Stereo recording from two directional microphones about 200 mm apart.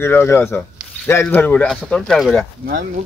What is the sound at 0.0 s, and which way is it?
Speech, 10° left (ahead or behind).